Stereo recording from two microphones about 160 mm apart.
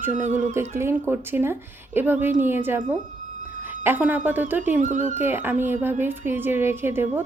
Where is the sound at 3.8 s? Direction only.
10° right (ahead or behind).